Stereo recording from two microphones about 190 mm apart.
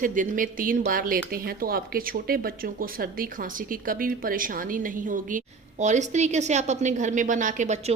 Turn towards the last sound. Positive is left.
turn(degrees=-40)  # may be behind; listen again after turning